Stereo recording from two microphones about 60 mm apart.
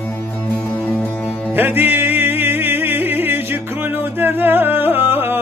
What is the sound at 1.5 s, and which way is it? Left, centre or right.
Music, right.